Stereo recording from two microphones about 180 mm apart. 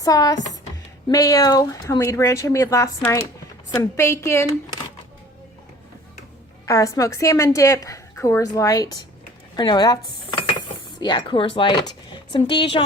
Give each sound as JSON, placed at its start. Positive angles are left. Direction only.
{"t": 0.0, "sound": "a woman's voice", "side_deg": 20}
{"t": 6.7, "sound": "a woman's voice", "side_deg": 20}
{"t": 11.0, "sound": "speech", "side_deg": 25}